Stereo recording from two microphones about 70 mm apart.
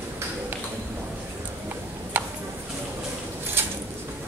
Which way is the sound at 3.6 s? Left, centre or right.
Right.